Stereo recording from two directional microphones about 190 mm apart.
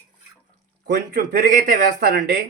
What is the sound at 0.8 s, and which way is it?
Speech, 60° right (ahead or behind).